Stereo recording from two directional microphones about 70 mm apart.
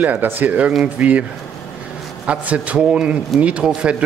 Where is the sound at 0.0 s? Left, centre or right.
Right.